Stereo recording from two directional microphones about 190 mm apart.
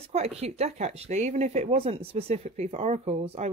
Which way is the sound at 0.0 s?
35° right (ahead or behind).